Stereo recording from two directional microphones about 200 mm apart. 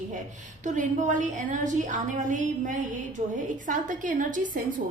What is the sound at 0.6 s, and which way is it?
A woman's voice, 40° right (ahead or behind).